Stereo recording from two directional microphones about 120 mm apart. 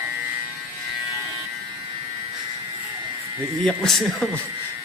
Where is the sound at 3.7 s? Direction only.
Centre (ahead or behind).